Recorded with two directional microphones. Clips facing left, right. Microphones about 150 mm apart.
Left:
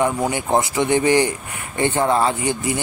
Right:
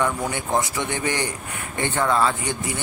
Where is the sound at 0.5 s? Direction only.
20° left (ahead or behind).